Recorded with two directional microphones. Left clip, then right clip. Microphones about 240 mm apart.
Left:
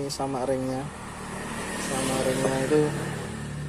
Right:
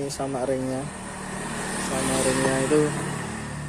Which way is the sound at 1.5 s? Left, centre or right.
Right.